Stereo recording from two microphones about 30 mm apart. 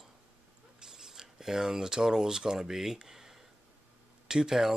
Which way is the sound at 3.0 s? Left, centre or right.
Centre.